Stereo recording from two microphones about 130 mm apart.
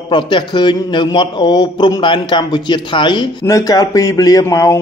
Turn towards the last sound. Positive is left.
turn(degrees=25)  # may be behind; listen again after turning